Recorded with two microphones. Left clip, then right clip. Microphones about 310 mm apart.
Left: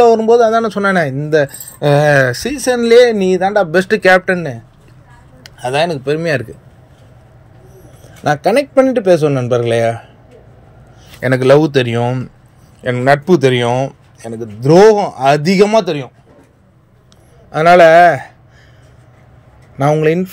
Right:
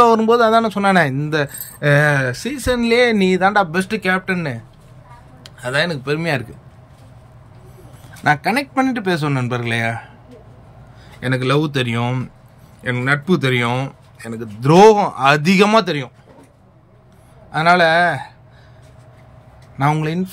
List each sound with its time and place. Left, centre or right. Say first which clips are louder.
0.0 s a man's voice: left 4 dB; centre
3.0 s a man's voice: left 5 dB; centre
5.4 s speech: left 4 dB; centre
8.2 s a man's voice: left 4 dB; centre
11.1 s a man's voice: left 9 dB; centre
14.7 s a man's voice: left 2 dB; centre
15.1 s a man's voice: left 3 dB; centre
17.5 s speech: left 7 dB; centre
19.8 s a man's voice: left 7 dB; centre